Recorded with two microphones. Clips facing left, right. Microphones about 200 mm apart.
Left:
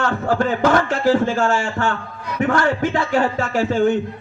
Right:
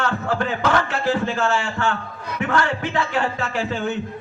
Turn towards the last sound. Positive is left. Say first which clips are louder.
# left 6 dB
turn(degrees=45)  # may be behind; listen again after turning